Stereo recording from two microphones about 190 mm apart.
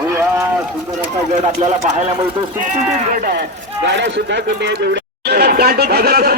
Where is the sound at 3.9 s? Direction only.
65° right (ahead or behind).